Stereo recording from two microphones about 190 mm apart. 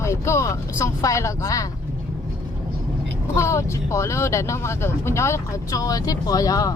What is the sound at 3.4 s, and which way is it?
Speech, 15° left (ahead or behind).